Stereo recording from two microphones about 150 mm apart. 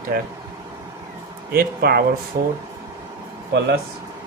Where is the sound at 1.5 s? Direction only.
85° right.